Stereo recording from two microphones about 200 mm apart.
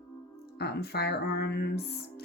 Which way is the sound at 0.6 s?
50° left (ahead or behind).